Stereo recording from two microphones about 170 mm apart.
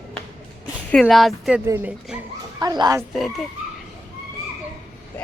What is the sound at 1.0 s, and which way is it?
Speech, centre (ahead or behind).